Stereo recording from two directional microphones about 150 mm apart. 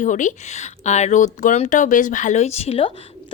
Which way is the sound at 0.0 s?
55° left (ahead or behind).